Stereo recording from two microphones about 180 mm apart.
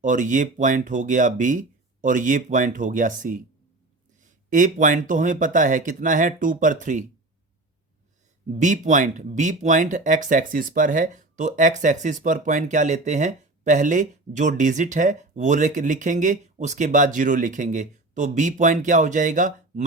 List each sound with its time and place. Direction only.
0.0 s speech: 45° right (ahead or behind)
8.4 s speech: 40° right (ahead or behind)